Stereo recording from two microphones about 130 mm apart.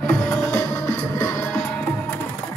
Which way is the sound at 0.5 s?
20° left (ahead or behind).